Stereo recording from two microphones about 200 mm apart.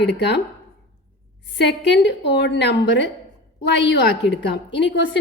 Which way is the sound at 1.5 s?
55° left (ahead or behind).